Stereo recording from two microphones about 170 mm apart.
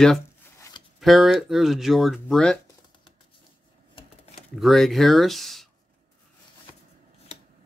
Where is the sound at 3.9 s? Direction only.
30° left (ahead or behind).